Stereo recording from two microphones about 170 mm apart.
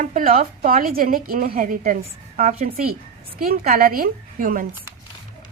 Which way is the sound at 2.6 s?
60° right (ahead or behind).